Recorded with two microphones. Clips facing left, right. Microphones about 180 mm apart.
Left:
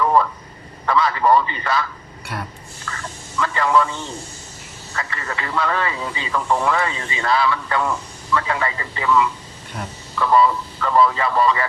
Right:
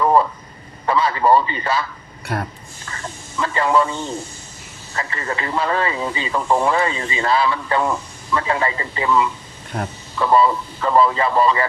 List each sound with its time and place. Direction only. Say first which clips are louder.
0.0 s telephone: right 2 dB; 25° right (ahead or behind)
0.9 s a man's voice: right 1 dB; 30° right (ahead or behind)
2.2 s speech: right 5 dB; 50° right (ahead or behind)
2.9 s speech: right 1 dB; 25° right (ahead or behind)
4.9 s speech: right 3 dB; 30° right (ahead or behind)
9.7 s speech: right 5 dB; 50° right (ahead or behind)
10.2 s speech: right 1 dB; 25° right (ahead or behind)